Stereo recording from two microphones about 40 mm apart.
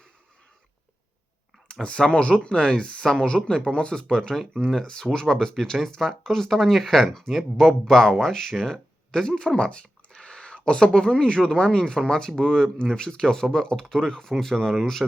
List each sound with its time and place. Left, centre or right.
1.8 s speech: left; by 15.0 s centre